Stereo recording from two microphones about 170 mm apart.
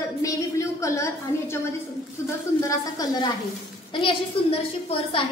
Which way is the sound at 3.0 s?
20° left (ahead or behind).